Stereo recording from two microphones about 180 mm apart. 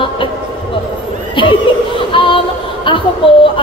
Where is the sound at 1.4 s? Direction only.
30° left (ahead or behind).